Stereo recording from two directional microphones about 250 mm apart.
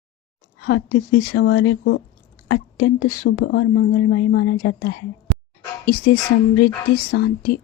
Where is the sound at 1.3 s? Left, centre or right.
Left.